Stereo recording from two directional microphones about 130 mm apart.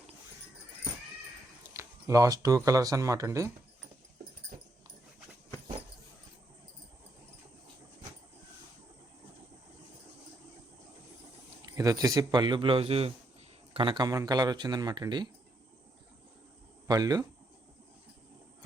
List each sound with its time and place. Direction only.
1.7 s a sound: 20° right (ahead or behind)
2.6 s speech: 25° right (ahead or behind)
11.6 s speech: 30° right (ahead or behind); by 13.1 s 50° right (ahead or behind)
13.7 s speech: 40° right (ahead or behind)
16.8 s speech: 30° right (ahead or behind)